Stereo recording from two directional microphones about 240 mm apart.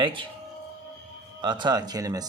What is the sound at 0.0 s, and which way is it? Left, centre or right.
Speech, right.